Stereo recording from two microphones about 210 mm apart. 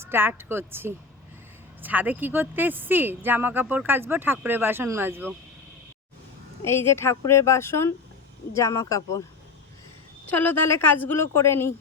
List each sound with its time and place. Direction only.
0.0 s a woman's voice: 10° right (ahead or behind)
6.7 s a woman's voice: 10° left (ahead or behind)
10.2 s a woman's voice: 10° left (ahead or behind)